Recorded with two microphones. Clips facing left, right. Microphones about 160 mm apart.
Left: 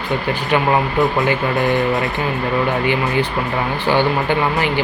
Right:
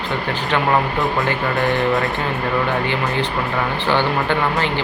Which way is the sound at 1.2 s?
20° left (ahead or behind).